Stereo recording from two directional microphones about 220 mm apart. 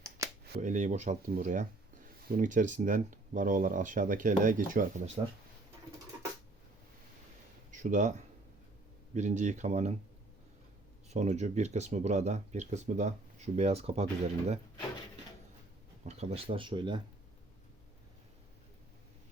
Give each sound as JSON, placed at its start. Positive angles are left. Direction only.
{"t": 0.6, "sound": "speech", "side_deg": -35}
{"t": 7.7, "sound": "speech", "side_deg": -35}
{"t": 9.1, "sound": "speech", "side_deg": -35}
{"t": 11.1, "sound": "speech", "side_deg": -30}
{"t": 16.0, "sound": "speech", "side_deg": -25}